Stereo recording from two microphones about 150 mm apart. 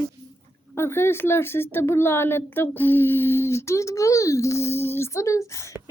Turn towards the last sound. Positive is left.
turn(degrees=20)  # may be behind; listen again after turning